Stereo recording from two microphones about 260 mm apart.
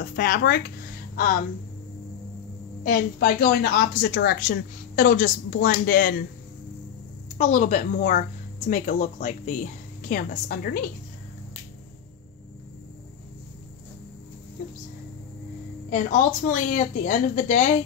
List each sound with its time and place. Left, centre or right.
0.0 s speech: left
2.8 s a woman's voice: left
7.3 s a woman's voice: left
15.9 s a woman's voice: left